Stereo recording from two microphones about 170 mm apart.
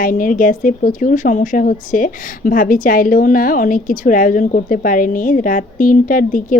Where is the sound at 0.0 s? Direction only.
55° left (ahead or behind).